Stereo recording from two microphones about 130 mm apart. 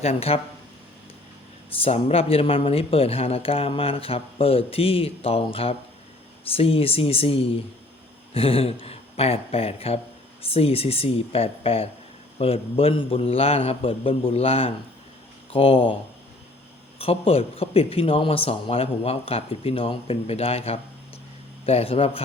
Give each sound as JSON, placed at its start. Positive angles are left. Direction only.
{"t": 0.0, "sound": "speech", "side_deg": 55}
{"t": 1.7, "sound": "speech", "side_deg": 50}
{"t": 17.0, "sound": "speech", "side_deg": 50}